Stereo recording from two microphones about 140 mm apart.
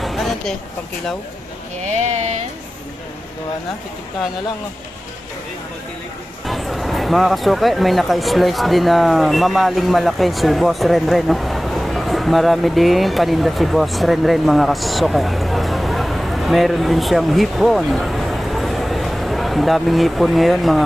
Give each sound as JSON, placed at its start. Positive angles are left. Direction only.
{"t": 0.0, "sound": "a sound", "side_deg": 0}
{"t": 1.9, "sound": "speech", "side_deg": -55}
{"t": 6.4, "sound": "speech", "side_deg": 0}